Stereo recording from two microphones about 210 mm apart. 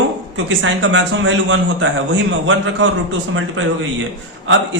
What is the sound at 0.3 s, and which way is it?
A man's voice, 65° right (ahead or behind).